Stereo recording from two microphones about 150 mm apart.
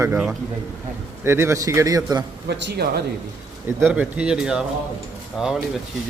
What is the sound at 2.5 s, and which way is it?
Speech, 90° right.